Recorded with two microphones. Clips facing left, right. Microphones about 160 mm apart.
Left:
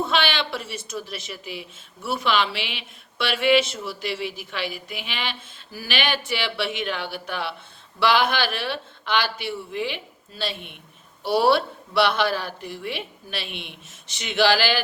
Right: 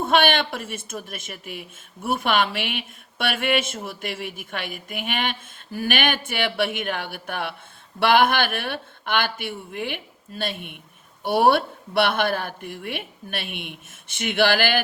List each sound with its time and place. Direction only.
0.0 s a woman's voice: 50° right (ahead or behind)